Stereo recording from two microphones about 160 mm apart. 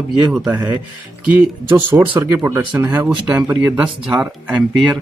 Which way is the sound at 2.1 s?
15° right (ahead or behind).